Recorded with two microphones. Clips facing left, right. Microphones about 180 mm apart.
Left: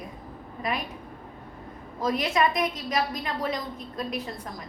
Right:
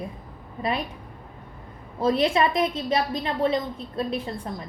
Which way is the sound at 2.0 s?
30° right (ahead or behind).